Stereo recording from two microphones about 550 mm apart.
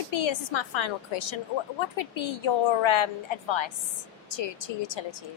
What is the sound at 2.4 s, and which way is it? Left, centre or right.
A woman's voice, left.